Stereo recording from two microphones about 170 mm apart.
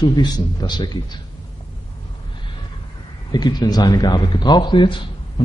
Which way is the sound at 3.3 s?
25° left (ahead or behind).